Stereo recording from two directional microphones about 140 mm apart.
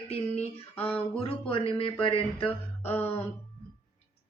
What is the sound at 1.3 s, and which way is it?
Speech, 40° left (ahead or behind).